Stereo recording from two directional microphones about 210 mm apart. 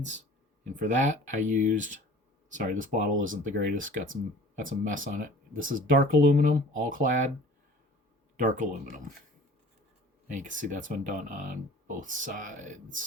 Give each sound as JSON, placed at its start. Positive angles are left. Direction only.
{"t": 0.6, "sound": "speech", "side_deg": -35}
{"t": 8.4, "sound": "speech", "side_deg": -35}
{"t": 10.2, "sound": "speech", "side_deg": -35}